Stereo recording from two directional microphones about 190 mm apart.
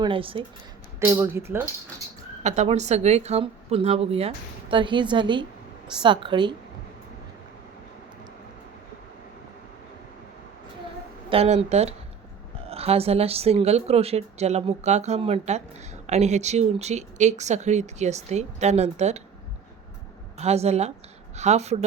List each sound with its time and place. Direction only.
0.0 s a woman's voice: 30° right (ahead or behind)
0.9 s speech: 10° right (ahead or behind)
2.4 s a woman's voice: 35° right (ahead or behind)
11.3 s a woman's voice: 35° right (ahead or behind)
20.4 s a woman's voice: 35° right (ahead or behind)